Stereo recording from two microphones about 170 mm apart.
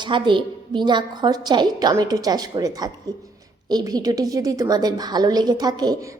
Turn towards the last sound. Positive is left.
turn(degrees=-25)  # may be behind; listen again after turning